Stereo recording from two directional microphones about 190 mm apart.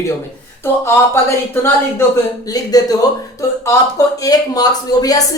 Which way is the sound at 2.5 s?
20° left (ahead or behind).